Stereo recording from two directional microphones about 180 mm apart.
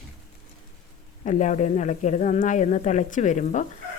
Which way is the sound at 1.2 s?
40° left (ahead or behind).